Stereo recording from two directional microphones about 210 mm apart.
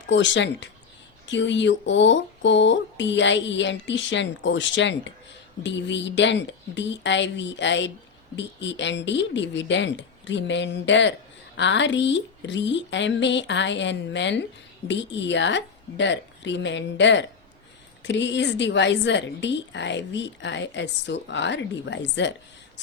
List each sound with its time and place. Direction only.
0.1 s a woman's voice: 60° left (ahead or behind)